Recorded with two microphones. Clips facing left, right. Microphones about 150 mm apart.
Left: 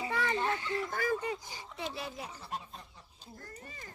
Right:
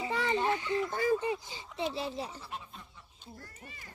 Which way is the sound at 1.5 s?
20° right (ahead or behind).